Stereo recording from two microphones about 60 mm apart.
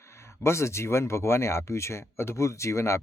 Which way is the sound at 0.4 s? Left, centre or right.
Left.